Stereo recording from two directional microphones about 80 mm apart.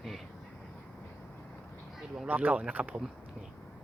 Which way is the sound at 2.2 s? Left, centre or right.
Centre.